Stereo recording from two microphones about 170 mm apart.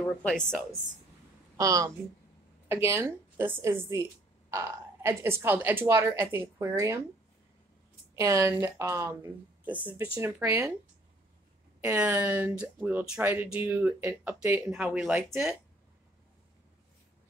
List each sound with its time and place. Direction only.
0.0 s a woman's voice: 5° left (ahead or behind)
1.6 s speech: 20° right (ahead or behind)
8.2 s speech: 20° right (ahead or behind)
11.8 s a woman's voice: 10° right (ahead or behind)